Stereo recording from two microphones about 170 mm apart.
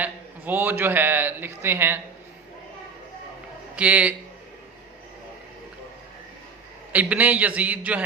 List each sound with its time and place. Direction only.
0.0 s a man's voice: 10° right (ahead or behind)
3.8 s a man's voice: 10° right (ahead or behind)
6.9 s a man's voice: 10° right (ahead or behind)